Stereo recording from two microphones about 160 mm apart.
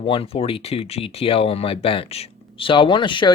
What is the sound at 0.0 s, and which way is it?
Speech, 35° left (ahead or behind).